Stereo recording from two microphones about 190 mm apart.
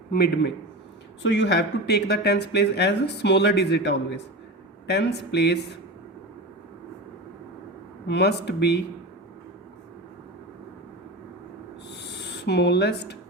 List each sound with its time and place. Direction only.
0.1 s speech: 55° left (ahead or behind)
1.2 s speech: 70° left (ahead or behind)
8.0 s speech: 65° left (ahead or behind)
11.9 s rub: 65° left (ahead or behind)